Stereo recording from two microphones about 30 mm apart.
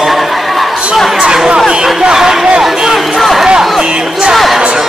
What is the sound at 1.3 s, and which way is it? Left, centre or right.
Speech, right.